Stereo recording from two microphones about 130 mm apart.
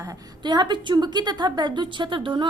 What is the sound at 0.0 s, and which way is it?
Speech, 30° right (ahead or behind).